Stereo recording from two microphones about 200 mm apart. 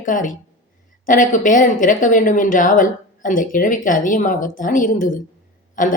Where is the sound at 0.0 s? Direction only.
40° left (ahead or behind).